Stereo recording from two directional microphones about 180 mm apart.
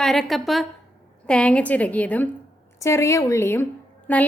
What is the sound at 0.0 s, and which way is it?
A woman's voice, centre (ahead or behind).